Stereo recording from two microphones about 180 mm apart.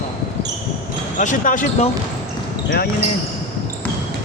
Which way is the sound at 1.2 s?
45° left (ahead or behind).